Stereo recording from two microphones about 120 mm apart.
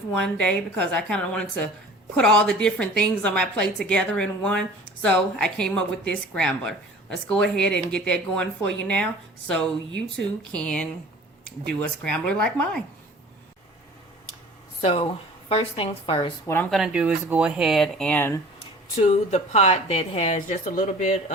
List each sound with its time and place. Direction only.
0.1 s a woman's voice: 5° left (ahead or behind)
14.8 s speech: 60° left (ahead or behind)
15.0 s speech: 45° left (ahead or behind)
16.7 s speech: 5° right (ahead or behind); by 18.3 s 15° left (ahead or behind)
18.9 s a woman's voice: 70° left (ahead or behind); by 21.3 s 90° left